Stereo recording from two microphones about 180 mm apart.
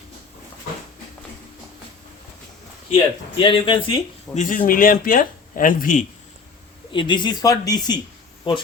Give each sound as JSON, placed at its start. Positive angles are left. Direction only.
{"t": 2.9, "sound": "speech", "side_deg": 30}
{"t": 4.4, "sound": "speech", "side_deg": 45}
{"t": 6.9, "sound": "speech", "side_deg": 25}